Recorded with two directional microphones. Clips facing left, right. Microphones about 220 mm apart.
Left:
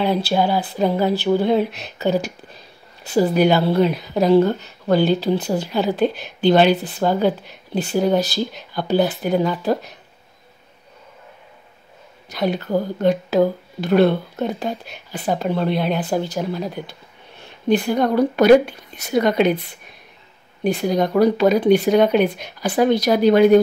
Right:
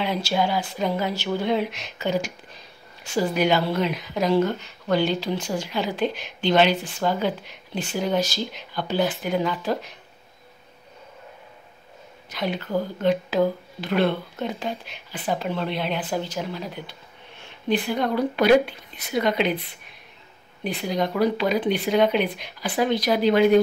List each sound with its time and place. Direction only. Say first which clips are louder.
0.0 s speech: left 5 dB; 35° left (ahead or behind)
12.3 s a woman's voice: left 6 dB; 40° left (ahead or behind)
17.7 s a woman's voice: left 6 dB; 45° left (ahead or behind)